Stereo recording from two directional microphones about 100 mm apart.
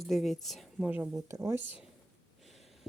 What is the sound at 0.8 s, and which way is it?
Speech, 15° right (ahead or behind).